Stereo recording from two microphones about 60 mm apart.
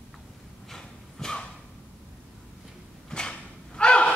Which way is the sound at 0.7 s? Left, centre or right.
Centre.